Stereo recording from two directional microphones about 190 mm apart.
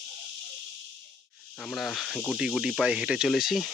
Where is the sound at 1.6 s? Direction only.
Centre (ahead or behind).